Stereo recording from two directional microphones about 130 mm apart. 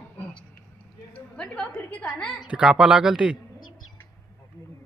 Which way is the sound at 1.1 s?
10° left (ahead or behind).